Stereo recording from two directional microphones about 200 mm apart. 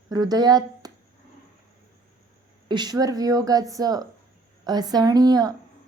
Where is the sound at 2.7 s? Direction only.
20° right (ahead or behind).